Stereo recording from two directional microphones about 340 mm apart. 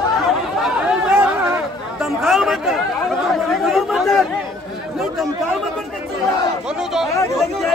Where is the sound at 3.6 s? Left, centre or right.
Centre.